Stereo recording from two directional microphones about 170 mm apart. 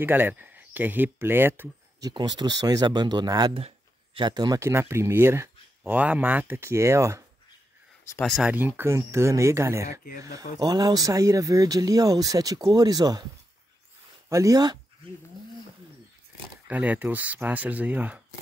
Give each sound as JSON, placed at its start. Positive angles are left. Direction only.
{"t": 0.0, "sound": "speech", "side_deg": -10}
{"t": 8.2, "sound": "speech", "side_deg": 0}
{"t": 14.3, "sound": "speech", "side_deg": -20}
{"t": 16.6, "sound": "speech", "side_deg": -10}